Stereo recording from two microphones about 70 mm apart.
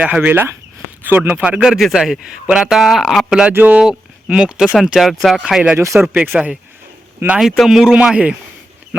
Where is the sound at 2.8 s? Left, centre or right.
Centre.